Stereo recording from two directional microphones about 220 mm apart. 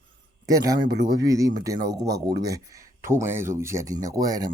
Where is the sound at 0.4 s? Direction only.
15° right (ahead or behind).